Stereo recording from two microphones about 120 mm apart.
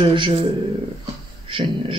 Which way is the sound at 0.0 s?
45° right (ahead or behind).